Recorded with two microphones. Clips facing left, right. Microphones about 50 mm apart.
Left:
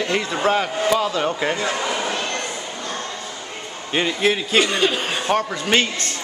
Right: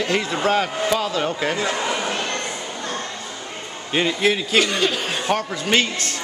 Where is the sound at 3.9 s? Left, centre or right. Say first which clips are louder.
Even; centre.